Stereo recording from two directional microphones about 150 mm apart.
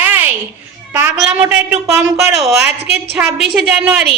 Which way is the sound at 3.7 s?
15° right (ahead or behind).